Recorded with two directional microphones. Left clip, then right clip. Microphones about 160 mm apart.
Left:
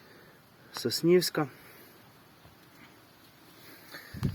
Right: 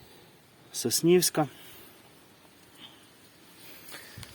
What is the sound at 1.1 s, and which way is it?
Speech, 55° right (ahead or behind).